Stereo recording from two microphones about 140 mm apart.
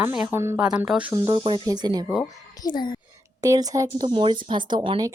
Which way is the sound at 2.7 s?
30° left (ahead or behind).